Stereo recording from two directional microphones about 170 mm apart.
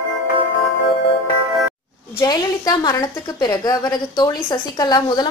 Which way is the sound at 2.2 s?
20° left (ahead or behind).